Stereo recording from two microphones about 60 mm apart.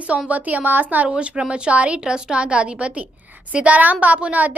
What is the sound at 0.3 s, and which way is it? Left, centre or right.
A woman's voice, right.